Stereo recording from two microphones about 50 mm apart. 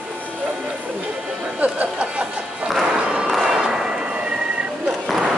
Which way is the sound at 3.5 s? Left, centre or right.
Centre.